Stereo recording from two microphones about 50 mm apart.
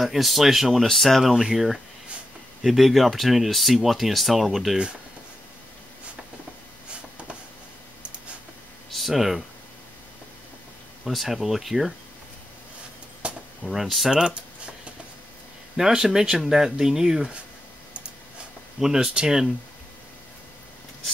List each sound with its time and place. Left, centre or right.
0.0 s speech: centre
6.9 s a sound: right
8.9 s speech: centre
11.1 s speech: centre
13.2 s a sound: right
13.7 s speech: centre
14.1 s typing: centre
15.7 s speech: centre
18.8 s speech: centre